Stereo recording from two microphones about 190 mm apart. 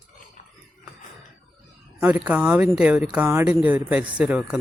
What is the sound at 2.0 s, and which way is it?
Speech, 5° right (ahead or behind).